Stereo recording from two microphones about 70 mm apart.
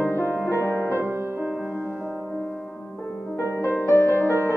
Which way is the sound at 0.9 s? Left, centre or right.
Right.